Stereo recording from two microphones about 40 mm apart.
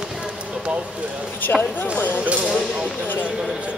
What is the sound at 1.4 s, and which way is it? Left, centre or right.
Speech, left.